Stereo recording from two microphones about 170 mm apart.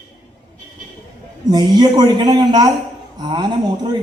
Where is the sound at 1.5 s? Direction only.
25° right (ahead or behind).